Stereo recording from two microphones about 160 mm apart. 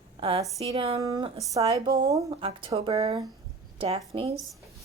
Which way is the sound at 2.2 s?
35° right (ahead or behind).